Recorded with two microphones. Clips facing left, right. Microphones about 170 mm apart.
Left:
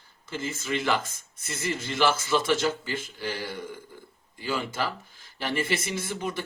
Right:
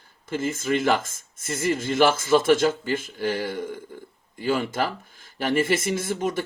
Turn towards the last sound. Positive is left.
turn(degrees=-45)  # may be behind; listen again after turning